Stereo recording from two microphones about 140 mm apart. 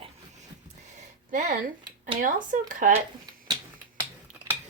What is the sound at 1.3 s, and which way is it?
Speech, 70° right (ahead or behind).